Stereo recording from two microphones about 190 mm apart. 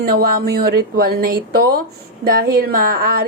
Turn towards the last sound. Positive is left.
turn(degrees=-50)  # may be behind; listen again after turning